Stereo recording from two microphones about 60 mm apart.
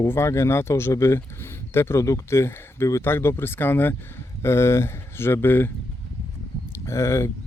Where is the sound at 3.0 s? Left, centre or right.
Left.